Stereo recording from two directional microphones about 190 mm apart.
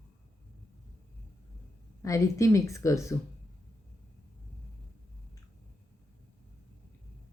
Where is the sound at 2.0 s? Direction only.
15° left (ahead or behind).